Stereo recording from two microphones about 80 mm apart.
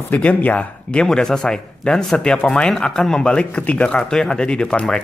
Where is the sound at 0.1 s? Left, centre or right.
Centre.